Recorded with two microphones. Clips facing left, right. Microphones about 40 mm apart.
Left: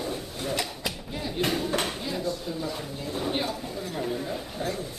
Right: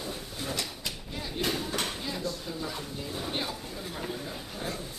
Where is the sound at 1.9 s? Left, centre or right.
Centre.